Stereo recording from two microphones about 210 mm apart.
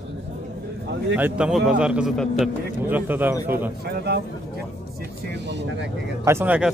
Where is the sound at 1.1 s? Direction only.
5° right (ahead or behind).